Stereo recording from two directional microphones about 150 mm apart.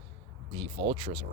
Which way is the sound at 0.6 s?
40° right (ahead or behind).